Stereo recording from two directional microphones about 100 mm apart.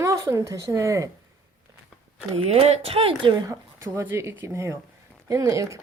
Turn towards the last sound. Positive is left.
turn(degrees=-35)  # may be behind; listen again after turning